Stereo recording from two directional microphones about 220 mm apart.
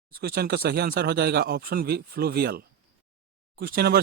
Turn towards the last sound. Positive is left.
turn(degrees=-45)  # may be behind; listen again after turning